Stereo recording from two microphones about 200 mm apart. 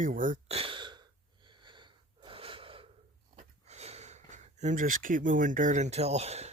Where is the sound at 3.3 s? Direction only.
35° right (ahead or behind).